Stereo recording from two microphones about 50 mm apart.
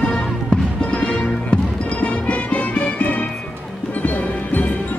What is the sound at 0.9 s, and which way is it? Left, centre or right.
Music, centre.